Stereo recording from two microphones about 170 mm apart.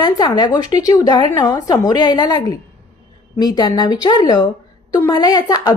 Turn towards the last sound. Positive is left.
turn(degrees=25)  # may be behind; listen again after turning